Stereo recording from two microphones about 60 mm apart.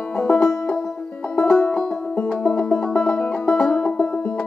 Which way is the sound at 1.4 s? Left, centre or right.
Centre.